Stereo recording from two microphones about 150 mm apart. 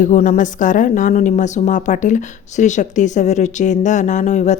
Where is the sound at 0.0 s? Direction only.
55° left (ahead or behind).